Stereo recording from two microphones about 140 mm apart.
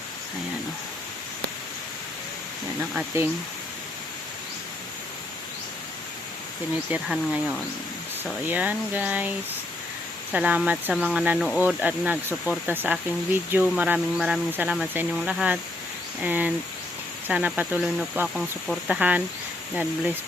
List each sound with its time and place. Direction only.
3.1 s speech: 20° right (ahead or behind)
7.1 s speech: 5° left (ahead or behind)
8.2 s speech: 10° right (ahead or behind)
10.3 s speech: 10° right (ahead or behind)